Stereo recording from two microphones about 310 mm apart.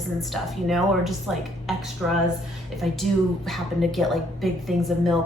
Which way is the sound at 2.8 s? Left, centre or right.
Centre.